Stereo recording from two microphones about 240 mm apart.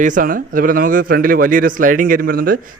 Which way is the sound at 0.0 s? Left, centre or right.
Right.